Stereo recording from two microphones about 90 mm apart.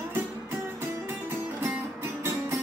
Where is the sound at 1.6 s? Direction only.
25° right (ahead or behind).